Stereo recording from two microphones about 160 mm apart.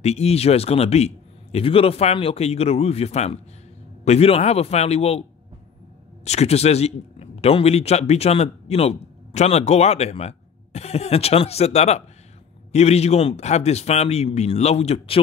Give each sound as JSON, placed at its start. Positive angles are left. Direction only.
{"t": 0.0, "sound": "a man's voice", "side_deg": 40}
{"t": 6.2, "sound": "a man's voice", "side_deg": 40}